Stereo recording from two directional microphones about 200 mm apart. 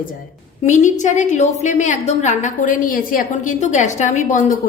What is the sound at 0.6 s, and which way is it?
A woman's voice, 35° left (ahead or behind).